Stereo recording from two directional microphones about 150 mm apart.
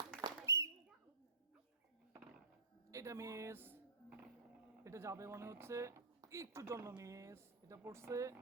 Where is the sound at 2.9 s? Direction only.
20° right (ahead or behind).